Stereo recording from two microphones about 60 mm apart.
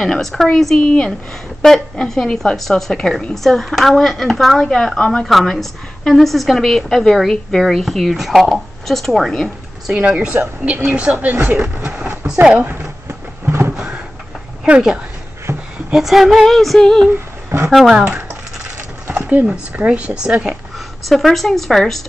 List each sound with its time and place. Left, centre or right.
0.0 s a woman's voice: centre
0.7 s a woman's voice: centre
1.6 s a woman's voice: centre
5.2 s a woman's voice: centre
9.9 s speech: centre; by 11.8 s right
11.8 s a sound: centre
12.5 s speech: right
13.5 s a sound: right
13.7 s a sound: centre
14.7 s a woman's voice: centre
17.1 s a sound: right
17.6 s a woman's voice: centre
19.1 s speech: centre
21.0 s a woman's voice: centre